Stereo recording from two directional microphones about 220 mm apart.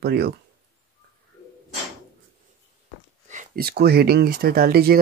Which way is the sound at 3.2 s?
35° right (ahead or behind).